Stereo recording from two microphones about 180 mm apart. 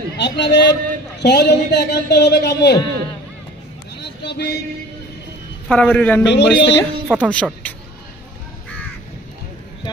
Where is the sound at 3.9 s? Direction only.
70° left (ahead or behind).